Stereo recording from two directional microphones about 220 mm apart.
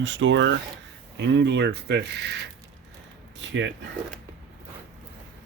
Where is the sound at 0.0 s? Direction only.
55° right (ahead or behind).